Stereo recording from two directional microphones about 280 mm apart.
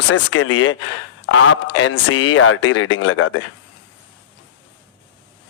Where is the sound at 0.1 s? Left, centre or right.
Left.